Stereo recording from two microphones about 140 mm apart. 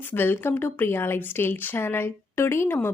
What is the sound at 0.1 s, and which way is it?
A woman's voice, 15° left (ahead or behind).